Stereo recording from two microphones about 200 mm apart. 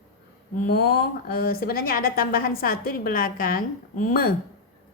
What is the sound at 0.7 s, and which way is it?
A woman's voice, 50° left (ahead or behind).